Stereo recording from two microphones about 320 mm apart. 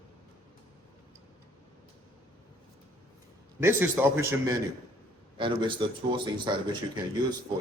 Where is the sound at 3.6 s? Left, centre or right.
Centre.